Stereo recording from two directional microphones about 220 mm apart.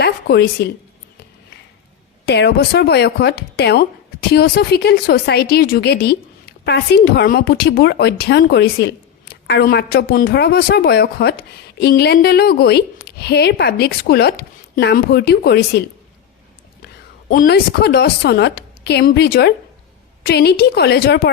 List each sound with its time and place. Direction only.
0.0 s speech: 50° left (ahead or behind)
2.2 s speech: 50° left (ahead or behind)
16.8 s a woman's voice: 40° left (ahead or behind)